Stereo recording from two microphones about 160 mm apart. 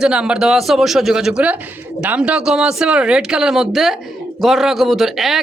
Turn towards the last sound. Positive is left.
turn(degrees=0)  # may be behind; listen again after turning